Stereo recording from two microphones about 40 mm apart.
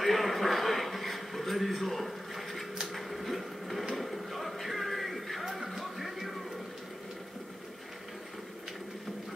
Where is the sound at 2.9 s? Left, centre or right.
Centre.